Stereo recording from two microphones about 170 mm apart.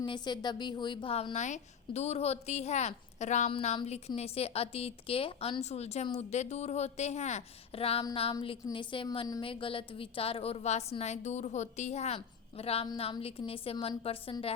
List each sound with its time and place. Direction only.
0.0 s a woman's voice: 25° left (ahead or behind)